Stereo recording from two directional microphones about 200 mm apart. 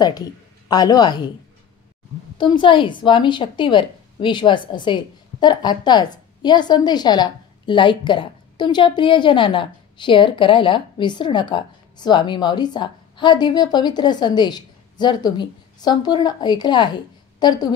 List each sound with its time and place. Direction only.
0.7 s a woman's voice: 20° left (ahead or behind)
2.3 s a woman's voice: 25° left (ahead or behind)